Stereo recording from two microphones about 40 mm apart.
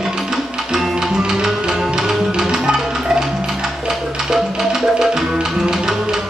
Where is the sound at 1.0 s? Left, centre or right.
Centre.